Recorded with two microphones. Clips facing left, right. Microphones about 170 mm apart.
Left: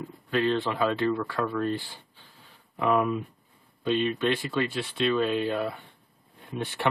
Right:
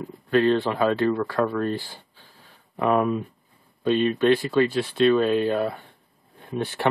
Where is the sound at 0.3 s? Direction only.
40° right (ahead or behind).